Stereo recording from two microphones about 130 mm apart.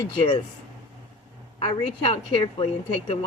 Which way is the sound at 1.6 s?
45° left (ahead or behind).